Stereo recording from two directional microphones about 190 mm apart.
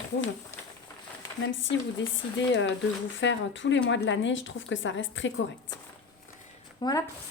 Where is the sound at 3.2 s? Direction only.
75° left (ahead or behind).